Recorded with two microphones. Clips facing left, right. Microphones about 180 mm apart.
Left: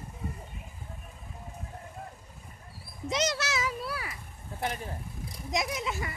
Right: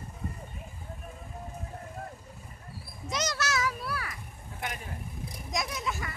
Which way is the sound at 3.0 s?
25° left (ahead or behind).